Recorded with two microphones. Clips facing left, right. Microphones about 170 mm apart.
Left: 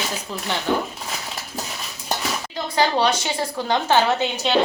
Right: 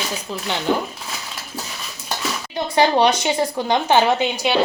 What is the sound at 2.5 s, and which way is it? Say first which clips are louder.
Speech: right 4 dB; 20° right (ahead or behind).